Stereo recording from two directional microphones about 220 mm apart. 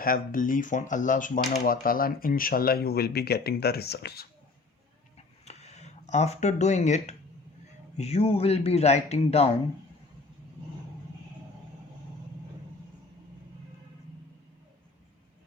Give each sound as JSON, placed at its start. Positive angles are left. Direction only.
{"t": 0.0, "sound": "speech", "side_deg": 40}
{"t": 5.1, "sound": "a sound", "side_deg": 30}
{"t": 7.9, "sound": "speech", "side_deg": 30}